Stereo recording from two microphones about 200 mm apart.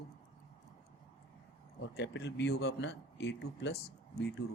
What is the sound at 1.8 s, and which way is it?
A man's voice, 60° left (ahead or behind).